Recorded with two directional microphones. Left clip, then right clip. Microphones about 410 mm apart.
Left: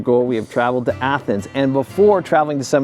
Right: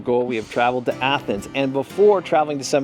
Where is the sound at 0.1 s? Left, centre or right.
Left.